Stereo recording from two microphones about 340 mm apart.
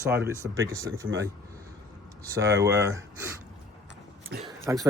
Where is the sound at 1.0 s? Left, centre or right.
Right.